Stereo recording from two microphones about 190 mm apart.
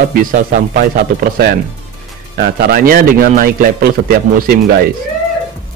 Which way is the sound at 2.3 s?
55° right (ahead or behind).